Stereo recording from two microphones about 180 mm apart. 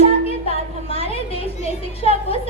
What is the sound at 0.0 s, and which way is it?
Speech, 35° left (ahead or behind).